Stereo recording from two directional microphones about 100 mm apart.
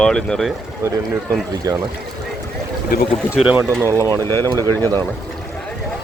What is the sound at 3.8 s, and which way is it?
Speech, 35° right (ahead or behind).